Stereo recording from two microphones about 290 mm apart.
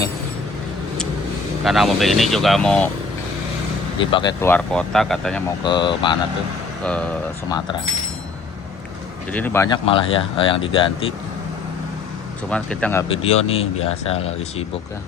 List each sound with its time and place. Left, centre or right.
1.6 s speech: centre
4.1 s speech: centre
5.6 s speech: centre
6.8 s speech: centre
9.3 s speech: centre
12.5 s speech: centre